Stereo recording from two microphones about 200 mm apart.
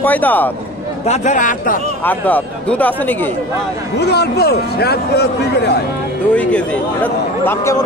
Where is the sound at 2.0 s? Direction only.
10° left (ahead or behind).